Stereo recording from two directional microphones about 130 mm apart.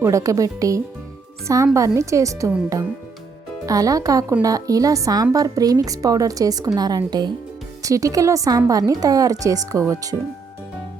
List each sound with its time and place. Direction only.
0.0 s a woman's voice: 25° right (ahead or behind)
3.7 s a woman's voice: 25° right (ahead or behind)